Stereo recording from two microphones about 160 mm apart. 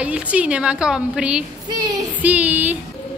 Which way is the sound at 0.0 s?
10° right (ahead or behind).